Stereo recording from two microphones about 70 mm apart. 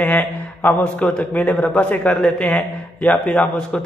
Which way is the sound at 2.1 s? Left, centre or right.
Centre.